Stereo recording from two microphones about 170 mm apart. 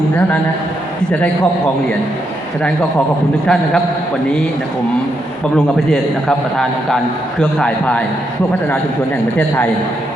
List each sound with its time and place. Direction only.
1.1 s a man's voice: 5° left (ahead or behind)
3.4 s a man's voice: 5° left (ahead or behind)
5.5 s a man's voice: centre (ahead or behind)